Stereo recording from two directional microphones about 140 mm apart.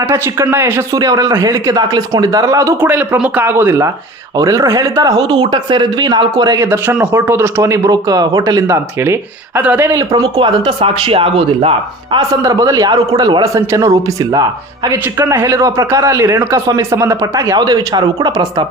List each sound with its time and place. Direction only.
0.1 s speech: 15° right (ahead or behind)
0.9 s a man's voice: 25° right (ahead or behind)
6.7 s a man's voice: 15° right (ahead or behind)
10.3 s speech: 40° right (ahead or behind)
12.1 s a man's voice: 25° right (ahead or behind)